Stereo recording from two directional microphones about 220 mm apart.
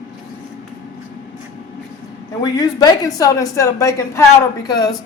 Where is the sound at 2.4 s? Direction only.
15° left (ahead or behind).